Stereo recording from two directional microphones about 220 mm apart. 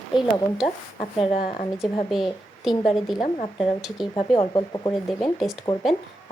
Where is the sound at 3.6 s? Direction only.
Centre (ahead or behind).